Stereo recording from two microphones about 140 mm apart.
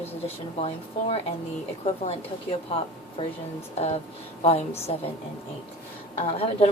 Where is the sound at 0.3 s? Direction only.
45° left (ahead or behind).